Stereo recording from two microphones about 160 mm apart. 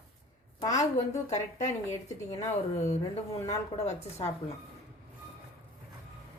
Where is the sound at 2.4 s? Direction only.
45° left (ahead or behind).